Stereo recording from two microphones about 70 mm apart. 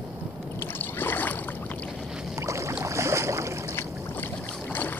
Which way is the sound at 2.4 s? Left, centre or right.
Right.